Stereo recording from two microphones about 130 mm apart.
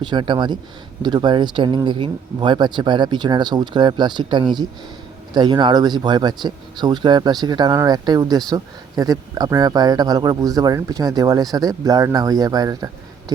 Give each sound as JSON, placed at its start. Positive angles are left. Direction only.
{"t": 0.0, "sound": "speech", "side_deg": -35}